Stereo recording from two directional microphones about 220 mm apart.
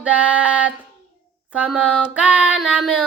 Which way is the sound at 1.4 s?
5° right (ahead or behind).